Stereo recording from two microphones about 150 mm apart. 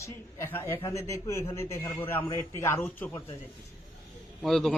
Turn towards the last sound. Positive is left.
turn(degrees=0)  # may be behind; listen again after turning